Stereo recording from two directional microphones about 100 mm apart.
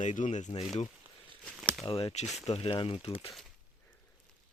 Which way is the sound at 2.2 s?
Centre (ahead or behind).